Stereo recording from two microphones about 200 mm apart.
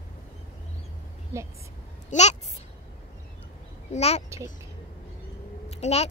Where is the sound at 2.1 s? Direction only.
35° left (ahead or behind).